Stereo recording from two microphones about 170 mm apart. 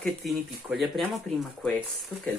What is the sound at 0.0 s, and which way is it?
Speech, centre (ahead or behind).